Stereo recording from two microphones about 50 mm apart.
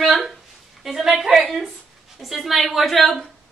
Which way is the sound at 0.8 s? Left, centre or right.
Centre.